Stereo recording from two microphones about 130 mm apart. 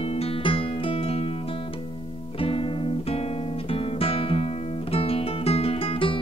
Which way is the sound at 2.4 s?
40° left (ahead or behind).